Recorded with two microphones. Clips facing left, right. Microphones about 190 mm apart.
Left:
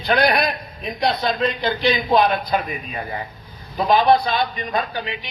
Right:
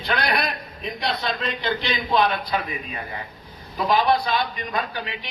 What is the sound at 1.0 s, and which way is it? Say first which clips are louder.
A man's voice: left 7 dB; 40° left (ahead or behind).